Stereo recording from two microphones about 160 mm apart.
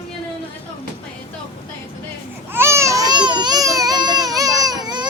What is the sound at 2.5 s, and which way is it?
Baby cry, 15° right (ahead or behind).